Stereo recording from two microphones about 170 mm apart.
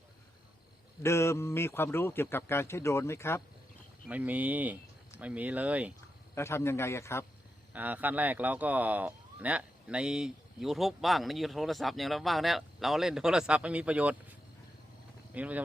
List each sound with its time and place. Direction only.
1.0 s speech: 15° left (ahead or behind)
4.1 s speech: 10° right (ahead or behind)
6.3 s speech: 15° left (ahead or behind)
7.7 s speech: 10° right (ahead or behind)
15.4 s speech: 10° right (ahead or behind)